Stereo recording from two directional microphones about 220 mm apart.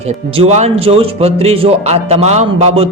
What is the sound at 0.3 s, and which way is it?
A man's voice, 30° right (ahead or behind).